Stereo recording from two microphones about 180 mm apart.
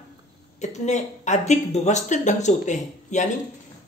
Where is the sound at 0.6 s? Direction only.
40° left (ahead or behind).